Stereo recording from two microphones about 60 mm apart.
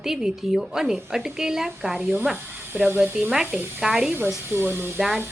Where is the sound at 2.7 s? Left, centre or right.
Right.